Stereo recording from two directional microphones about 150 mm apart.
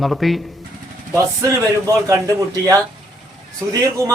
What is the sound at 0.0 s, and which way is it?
Speech, centre (ahead or behind).